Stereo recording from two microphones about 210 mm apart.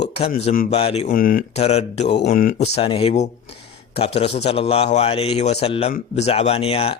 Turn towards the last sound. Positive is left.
turn(degrees=30)  # may be behind; listen again after turning